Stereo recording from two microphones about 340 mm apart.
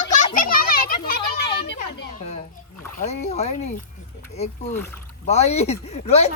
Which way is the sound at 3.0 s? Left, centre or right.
Centre.